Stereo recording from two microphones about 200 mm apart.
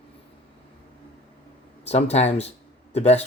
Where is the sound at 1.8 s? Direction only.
30° left (ahead or behind).